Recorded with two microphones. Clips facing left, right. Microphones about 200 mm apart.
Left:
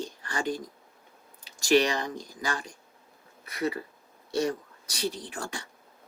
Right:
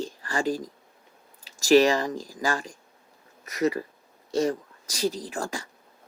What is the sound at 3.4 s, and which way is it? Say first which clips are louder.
Speech: right 5 dB; 40° right (ahead or behind).